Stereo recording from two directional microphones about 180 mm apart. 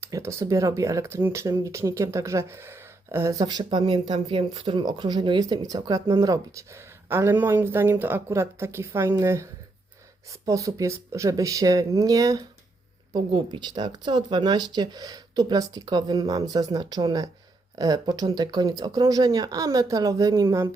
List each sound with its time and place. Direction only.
0.0 s speech: 15° right (ahead or behind)